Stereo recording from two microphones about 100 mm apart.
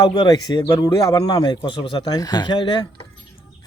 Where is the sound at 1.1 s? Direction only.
50° left (ahead or behind).